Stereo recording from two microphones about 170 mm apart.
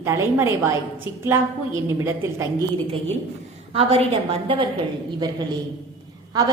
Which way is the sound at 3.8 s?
35° right (ahead or behind).